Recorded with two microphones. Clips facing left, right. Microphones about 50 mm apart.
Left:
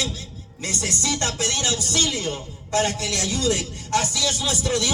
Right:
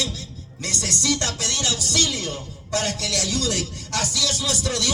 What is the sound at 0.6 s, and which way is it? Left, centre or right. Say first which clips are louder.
A man's voice: even; left.